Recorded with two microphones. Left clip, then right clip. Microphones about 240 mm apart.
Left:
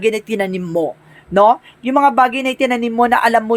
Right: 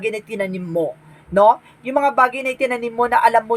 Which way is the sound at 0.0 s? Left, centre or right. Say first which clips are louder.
Left 6 dB; left.